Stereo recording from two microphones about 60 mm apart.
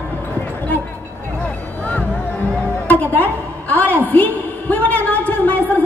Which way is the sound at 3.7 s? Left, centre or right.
Left.